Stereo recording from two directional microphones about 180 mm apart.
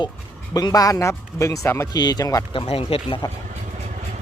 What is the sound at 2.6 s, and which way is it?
Speech, 30° left (ahead or behind).